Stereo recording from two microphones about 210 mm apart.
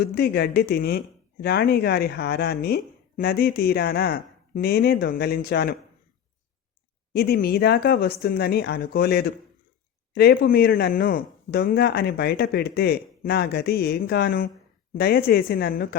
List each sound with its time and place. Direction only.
0.0 s speech: 50° left (ahead or behind)
7.1 s speech: 45° left (ahead or behind)